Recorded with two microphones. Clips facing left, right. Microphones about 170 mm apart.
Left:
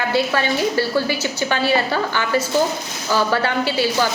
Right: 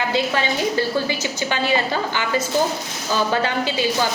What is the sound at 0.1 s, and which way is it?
A woman's voice, 20° right (ahead or behind).